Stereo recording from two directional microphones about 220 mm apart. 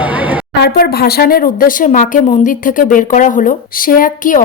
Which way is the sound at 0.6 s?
45° left (ahead or behind).